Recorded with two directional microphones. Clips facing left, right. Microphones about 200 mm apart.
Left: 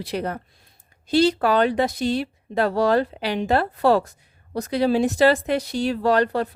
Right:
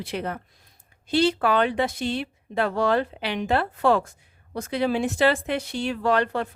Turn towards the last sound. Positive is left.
turn(degrees=35)  # may be behind; listen again after turning